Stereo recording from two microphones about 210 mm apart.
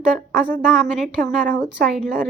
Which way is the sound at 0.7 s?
Centre (ahead or behind).